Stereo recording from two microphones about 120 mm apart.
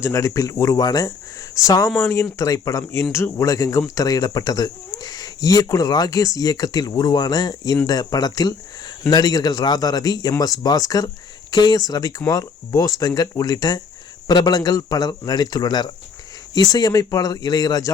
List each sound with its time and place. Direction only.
0.0 s speech: 25° left (ahead or behind)